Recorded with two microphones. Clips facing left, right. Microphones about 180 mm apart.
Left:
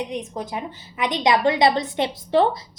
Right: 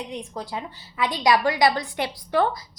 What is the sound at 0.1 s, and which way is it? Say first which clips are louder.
A woman's voice: left 3 dB; 20° left (ahead or behind).